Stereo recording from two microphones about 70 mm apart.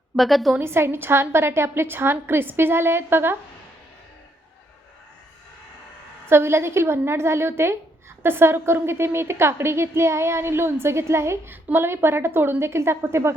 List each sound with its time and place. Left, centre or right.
0.2 s a woman's voice: centre
0.6 s a woman's voice: right
6.2 s a woman's voice: right